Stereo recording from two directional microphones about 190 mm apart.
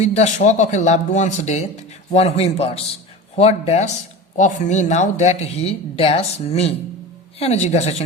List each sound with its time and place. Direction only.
0.0 s speech: 35° left (ahead or behind)